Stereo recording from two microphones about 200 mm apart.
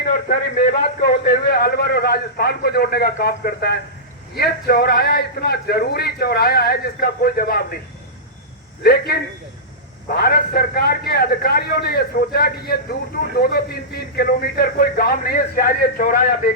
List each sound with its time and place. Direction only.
0.0 s a man's voice: 45° left (ahead or behind)
8.8 s a man's voice: 50° left (ahead or behind)